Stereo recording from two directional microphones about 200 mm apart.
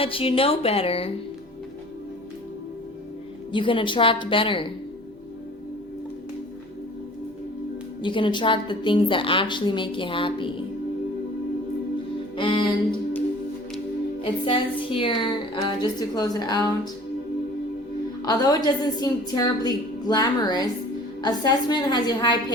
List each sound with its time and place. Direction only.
0.0 s a woman's voice: 25° left (ahead or behind)
3.5 s a woman's voice: 25° left (ahead or behind)
8.0 s a woman's voice: 25° left (ahead or behind)
12.4 s a woman's voice: 25° left (ahead or behind)
14.2 s a woman's voice: 25° left (ahead or behind)
18.3 s a woman's voice: 20° left (ahead or behind)